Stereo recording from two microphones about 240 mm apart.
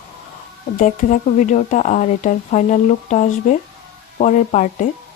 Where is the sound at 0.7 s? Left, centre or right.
Left.